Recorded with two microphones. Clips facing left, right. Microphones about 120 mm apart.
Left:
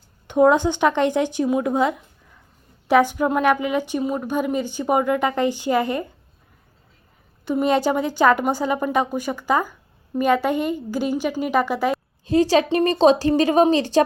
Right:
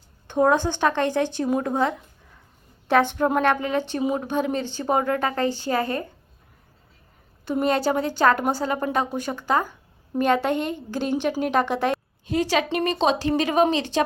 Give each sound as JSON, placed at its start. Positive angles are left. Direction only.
{"t": 0.3, "sound": "a woman's voice", "side_deg": 15}
{"t": 4.0, "sound": "speech", "side_deg": -5}
{"t": 4.3, "sound": "a woman's voice", "side_deg": 10}
{"t": 7.5, "sound": "a woman's voice", "side_deg": 10}
{"t": 12.2, "sound": "a woman's voice", "side_deg": 30}